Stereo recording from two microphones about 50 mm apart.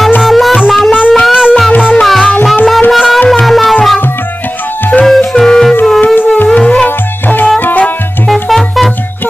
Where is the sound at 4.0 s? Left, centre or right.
Left.